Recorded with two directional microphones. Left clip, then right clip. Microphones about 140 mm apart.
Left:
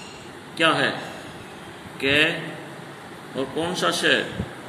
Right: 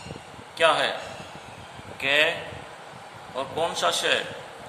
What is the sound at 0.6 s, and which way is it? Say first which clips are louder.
Speech: left 1 dB; 90° right.